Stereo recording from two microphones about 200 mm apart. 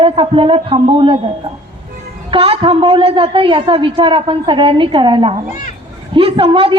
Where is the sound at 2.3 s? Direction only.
30° right (ahead or behind).